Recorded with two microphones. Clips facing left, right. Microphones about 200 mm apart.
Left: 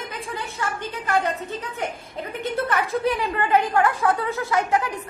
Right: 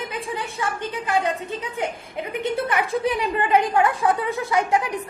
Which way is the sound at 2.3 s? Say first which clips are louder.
Right 1 dB; 15° right (ahead or behind).